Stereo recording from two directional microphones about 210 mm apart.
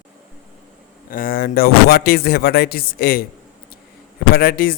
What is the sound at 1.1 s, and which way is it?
A man's voice, 45° left (ahead or behind).